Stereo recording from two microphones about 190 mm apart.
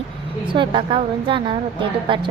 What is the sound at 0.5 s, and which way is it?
A woman's voice, 25° right (ahead or behind).